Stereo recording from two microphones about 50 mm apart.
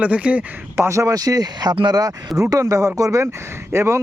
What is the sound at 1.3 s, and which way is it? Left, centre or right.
Speech, right.